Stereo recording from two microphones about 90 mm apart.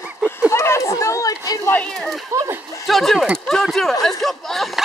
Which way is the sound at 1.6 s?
20° left (ahead or behind).